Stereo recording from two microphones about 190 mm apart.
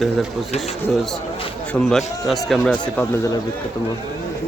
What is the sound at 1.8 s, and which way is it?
Speech, centre (ahead or behind).